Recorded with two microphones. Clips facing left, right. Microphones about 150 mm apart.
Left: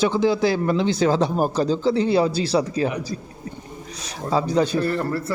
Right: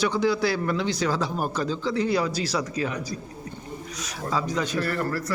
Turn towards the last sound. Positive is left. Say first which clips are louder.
# left 4 dB
turn(degrees=25)  # may be behind; listen again after turning